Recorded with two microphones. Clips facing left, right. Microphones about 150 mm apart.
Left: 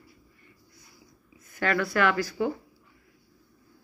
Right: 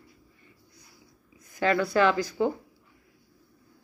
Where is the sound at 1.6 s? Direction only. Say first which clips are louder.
Right 2 dB; 25° right (ahead or behind).